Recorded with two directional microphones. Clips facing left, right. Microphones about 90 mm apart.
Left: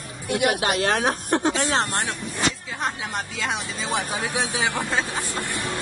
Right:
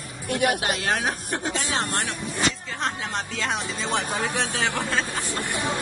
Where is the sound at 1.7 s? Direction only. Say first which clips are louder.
Left 3 dB; 25° left (ahead or behind).